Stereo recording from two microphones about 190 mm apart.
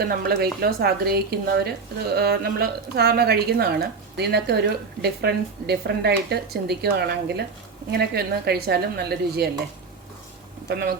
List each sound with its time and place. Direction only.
0.0 s a woman's voice: 55° right (ahead or behind)
10.7 s a woman's voice: 55° right (ahead or behind)